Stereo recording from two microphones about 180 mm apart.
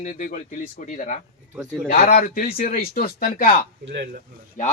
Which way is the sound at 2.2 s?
55° left (ahead or behind).